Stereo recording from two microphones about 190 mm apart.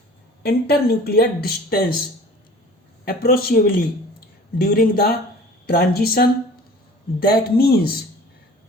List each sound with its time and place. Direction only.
0.4 s speech: 55° left (ahead or behind)
3.0 s speech: 50° left (ahead or behind)